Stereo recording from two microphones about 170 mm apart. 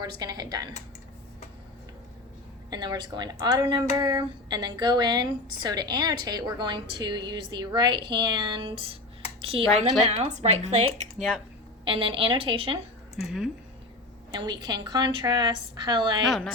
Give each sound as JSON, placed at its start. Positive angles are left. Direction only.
{"t": 0.0, "sound": "speech", "side_deg": -25}
{"t": 2.6, "sound": "speech", "side_deg": -25}
{"t": 11.2, "sound": "speech", "side_deg": 0}
{"t": 11.9, "sound": "speech", "side_deg": -30}
{"t": 13.1, "sound": "speech", "side_deg": 0}
{"t": 14.3, "sound": "speech", "side_deg": -25}
{"t": 16.2, "sound": "speech", "side_deg": 0}